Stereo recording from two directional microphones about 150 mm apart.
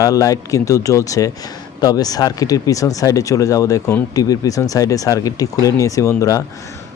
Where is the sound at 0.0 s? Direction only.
25° left (ahead or behind).